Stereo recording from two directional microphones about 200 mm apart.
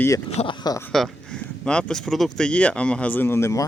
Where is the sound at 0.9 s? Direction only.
Centre (ahead or behind).